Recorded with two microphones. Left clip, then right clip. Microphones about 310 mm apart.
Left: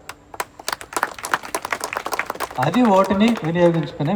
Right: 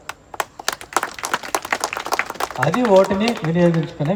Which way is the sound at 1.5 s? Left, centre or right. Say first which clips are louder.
Right 3 dB; centre.